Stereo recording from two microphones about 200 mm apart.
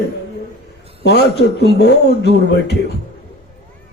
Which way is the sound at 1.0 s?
55° left (ahead or behind).